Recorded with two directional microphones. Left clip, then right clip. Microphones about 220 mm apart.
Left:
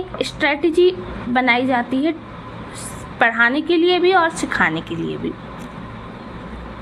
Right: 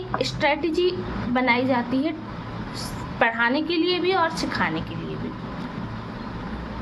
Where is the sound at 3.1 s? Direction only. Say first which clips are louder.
Left 6 dB; 15° left (ahead or behind).